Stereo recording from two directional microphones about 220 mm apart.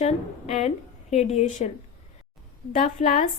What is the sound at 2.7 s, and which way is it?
Speech, 35° left (ahead or behind).